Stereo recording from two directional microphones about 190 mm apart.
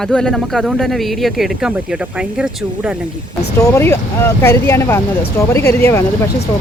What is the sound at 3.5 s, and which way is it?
Speech, 15° left (ahead or behind).